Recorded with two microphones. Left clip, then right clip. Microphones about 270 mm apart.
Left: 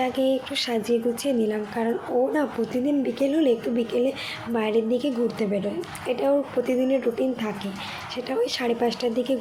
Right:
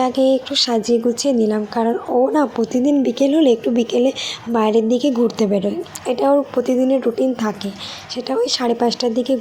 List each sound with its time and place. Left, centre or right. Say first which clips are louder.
0.0 s speech: right 8 dB; centre